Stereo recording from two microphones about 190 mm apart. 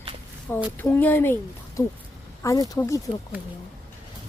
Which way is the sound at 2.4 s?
15° left (ahead or behind).